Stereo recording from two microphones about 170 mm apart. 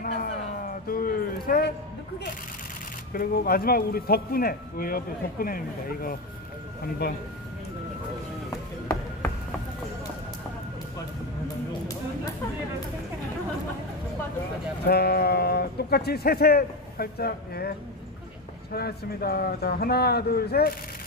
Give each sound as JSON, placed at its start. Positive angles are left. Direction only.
{"t": 0.0, "sound": "a sound", "side_deg": 55}
{"t": 3.1, "sound": "speech", "side_deg": 60}
{"t": 7.0, "sound": "a man's voice", "side_deg": 70}
{"t": 14.9, "sound": "a man's voice", "side_deg": 70}